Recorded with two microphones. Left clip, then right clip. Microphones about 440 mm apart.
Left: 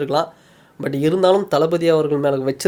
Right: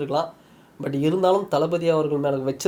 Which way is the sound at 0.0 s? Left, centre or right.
Left.